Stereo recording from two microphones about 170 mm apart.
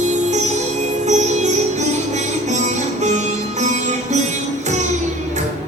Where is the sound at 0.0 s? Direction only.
45° right (ahead or behind).